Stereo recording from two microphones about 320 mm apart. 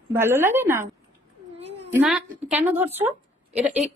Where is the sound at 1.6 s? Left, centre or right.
Centre.